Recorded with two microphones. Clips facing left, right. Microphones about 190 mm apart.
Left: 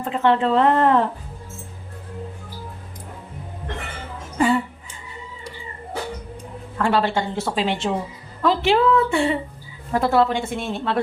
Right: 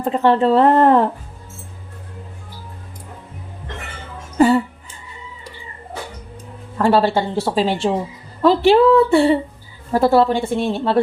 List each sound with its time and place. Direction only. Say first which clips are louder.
0.0 s speech: right 4 dB; 35° right (ahead or behind)
4.4 s music: right 6 dB; 40° right (ahead or behind)
6.7 s speech: right 5 dB; 35° right (ahead or behind)